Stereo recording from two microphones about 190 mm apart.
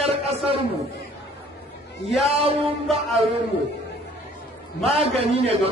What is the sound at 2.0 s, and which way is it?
Speech, 30° right (ahead or behind).